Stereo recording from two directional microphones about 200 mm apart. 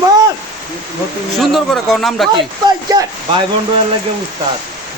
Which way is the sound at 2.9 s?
20° right (ahead or behind).